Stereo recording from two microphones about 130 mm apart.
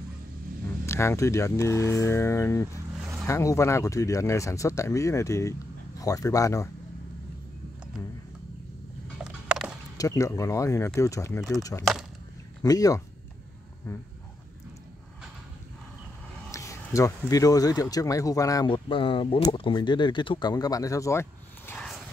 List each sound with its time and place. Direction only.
0.8 s speech: 20° left (ahead or behind)
9.2 s a sound: 5° right (ahead or behind)
9.9 s speech: 25° left (ahead or behind)
16.5 s a sound: 25° left (ahead or behind)
17.3 s speech: 25° left (ahead or behind)
18.7 s speech: 40° left (ahead or behind); by 21.7 s 20° left (ahead or behind)